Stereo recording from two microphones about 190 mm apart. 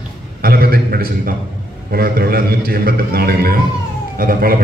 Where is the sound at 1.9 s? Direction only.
55° right (ahead or behind).